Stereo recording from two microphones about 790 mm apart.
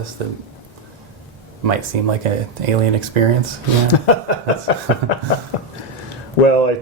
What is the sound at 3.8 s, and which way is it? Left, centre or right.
Speech, left.